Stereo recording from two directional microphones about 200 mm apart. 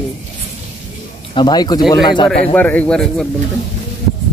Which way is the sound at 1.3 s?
20° left (ahead or behind).